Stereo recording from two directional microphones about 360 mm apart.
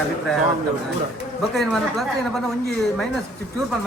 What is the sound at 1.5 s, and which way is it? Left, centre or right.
Speech, centre.